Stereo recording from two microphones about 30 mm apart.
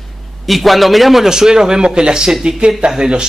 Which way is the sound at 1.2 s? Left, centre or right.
Centre.